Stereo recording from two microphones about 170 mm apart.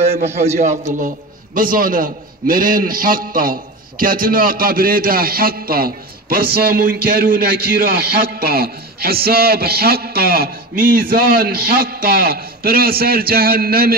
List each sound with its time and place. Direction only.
0.0 s a man's voice: 40° right (ahead or behind); by 13.9 s 60° right (ahead or behind)